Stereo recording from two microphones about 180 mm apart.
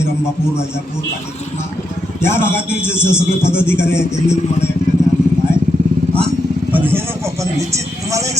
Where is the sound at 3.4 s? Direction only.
15° left (ahead or behind).